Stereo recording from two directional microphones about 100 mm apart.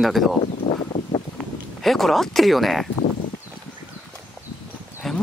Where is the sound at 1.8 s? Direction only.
Centre (ahead or behind).